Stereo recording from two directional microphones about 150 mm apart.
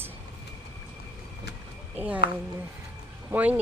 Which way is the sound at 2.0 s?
10° right (ahead or behind).